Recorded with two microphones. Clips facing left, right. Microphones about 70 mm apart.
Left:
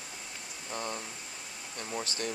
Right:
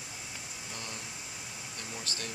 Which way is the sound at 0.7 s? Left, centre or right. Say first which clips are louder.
Left 8 dB; left.